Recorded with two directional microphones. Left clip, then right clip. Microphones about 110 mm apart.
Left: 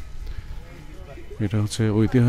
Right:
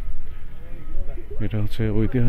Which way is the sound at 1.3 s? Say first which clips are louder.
Left 3 dB; 90° left.